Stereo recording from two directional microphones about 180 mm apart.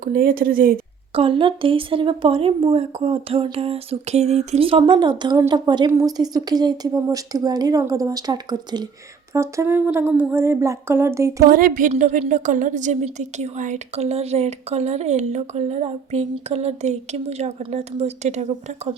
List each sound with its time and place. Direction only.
0.0 s speech: 50° right (ahead or behind)
1.1 s speech: 30° right (ahead or behind)
9.3 s a sound: 15° right (ahead or behind)
11.4 s a woman's voice: 50° right (ahead or behind)